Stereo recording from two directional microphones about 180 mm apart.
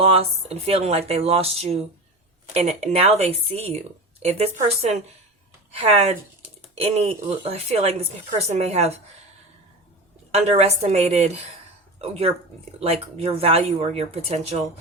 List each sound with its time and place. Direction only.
0.0 s speech: 35° right (ahead or behind)
10.3 s speech: 35° right (ahead or behind)